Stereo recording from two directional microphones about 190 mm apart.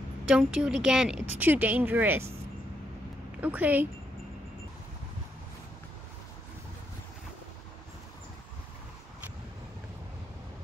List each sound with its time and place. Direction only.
0.2 s a woman's voice: 5° right (ahead or behind)
3.3 s speech: 10° right (ahead or behind)